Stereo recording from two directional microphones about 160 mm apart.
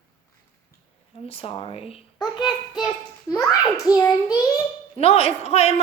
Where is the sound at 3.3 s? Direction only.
20° left (ahead or behind).